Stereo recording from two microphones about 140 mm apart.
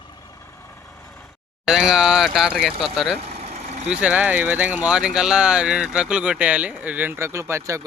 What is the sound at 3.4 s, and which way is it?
Vehicle, 50° right (ahead or behind).